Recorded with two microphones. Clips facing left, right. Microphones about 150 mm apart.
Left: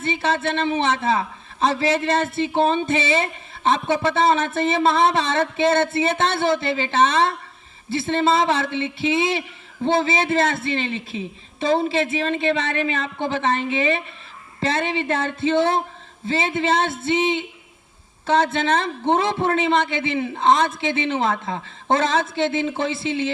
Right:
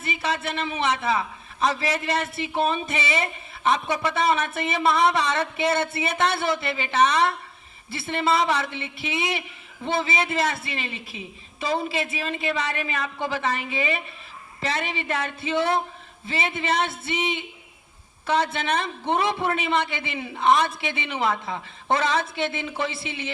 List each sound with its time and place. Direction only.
0.0 s a man's voice: 25° left (ahead or behind)
18.6 s a man's voice: 25° left (ahead or behind)
20.9 s a man's voice: 25° left (ahead or behind)